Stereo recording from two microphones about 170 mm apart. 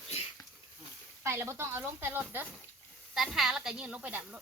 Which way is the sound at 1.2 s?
15° right (ahead or behind).